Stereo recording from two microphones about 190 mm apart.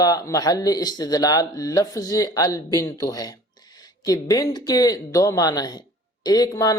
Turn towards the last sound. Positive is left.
turn(degrees=20)  # may be behind; listen again after turning